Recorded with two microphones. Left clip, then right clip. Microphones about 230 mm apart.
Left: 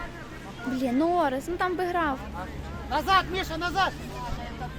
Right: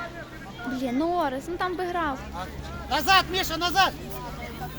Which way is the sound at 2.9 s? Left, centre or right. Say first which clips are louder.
Right 2 dB; right.